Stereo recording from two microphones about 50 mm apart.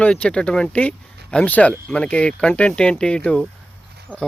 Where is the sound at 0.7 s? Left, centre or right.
Left.